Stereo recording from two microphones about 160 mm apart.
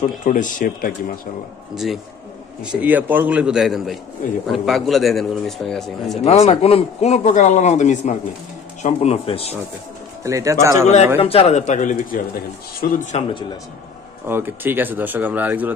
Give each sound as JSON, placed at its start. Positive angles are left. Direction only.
{"t": 0.2, "sound": "speech", "side_deg": 55}
{"t": 2.6, "sound": "a man's voice", "side_deg": -5}
{"t": 6.2, "sound": "speech", "side_deg": 40}
{"t": 10.2, "sound": "speech", "side_deg": -20}
{"t": 11.1, "sound": "speech", "side_deg": 35}
{"t": 14.2, "sound": "speech", "side_deg": -15}